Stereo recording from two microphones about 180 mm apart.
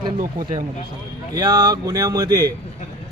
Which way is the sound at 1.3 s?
20° right (ahead or behind).